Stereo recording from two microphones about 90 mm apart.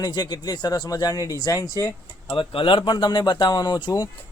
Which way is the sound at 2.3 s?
80° left.